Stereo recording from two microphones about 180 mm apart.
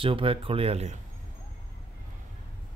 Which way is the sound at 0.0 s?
30° right (ahead or behind).